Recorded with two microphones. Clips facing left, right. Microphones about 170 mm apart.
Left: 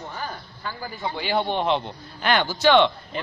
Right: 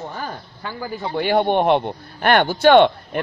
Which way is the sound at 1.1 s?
55° right (ahead or behind).